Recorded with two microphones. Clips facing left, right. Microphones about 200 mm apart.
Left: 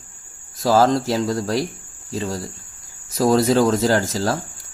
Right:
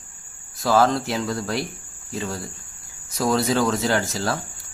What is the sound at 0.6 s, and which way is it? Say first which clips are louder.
Speech: left 3 dB; 30° left (ahead or behind).